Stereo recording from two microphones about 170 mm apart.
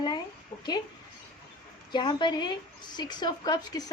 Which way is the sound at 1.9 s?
25° left (ahead or behind).